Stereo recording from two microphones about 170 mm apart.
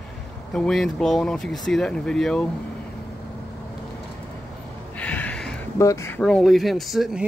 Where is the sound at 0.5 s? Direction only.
5° left (ahead or behind).